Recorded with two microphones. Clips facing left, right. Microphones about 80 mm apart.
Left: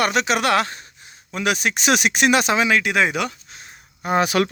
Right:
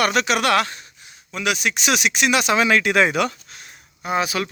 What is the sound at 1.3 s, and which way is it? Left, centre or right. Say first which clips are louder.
Speech: left 1 dB; left.